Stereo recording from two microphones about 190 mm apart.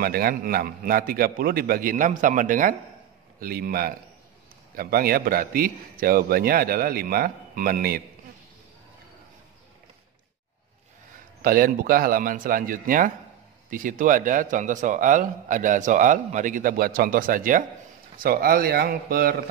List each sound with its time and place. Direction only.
0.0 s a man's voice: 50° right (ahead or behind)
11.4 s a man's voice: 50° right (ahead or behind)